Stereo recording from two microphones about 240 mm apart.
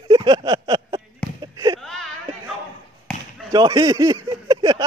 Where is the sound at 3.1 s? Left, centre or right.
Centre.